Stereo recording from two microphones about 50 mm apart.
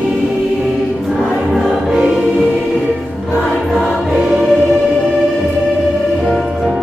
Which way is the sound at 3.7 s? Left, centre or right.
Centre.